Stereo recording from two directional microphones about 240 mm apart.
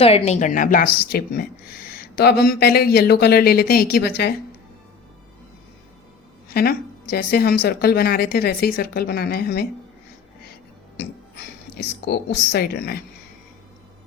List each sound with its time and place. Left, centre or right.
0.0 s a woman's voice: left
6.5 s a woman's voice: left
10.9 s speech: left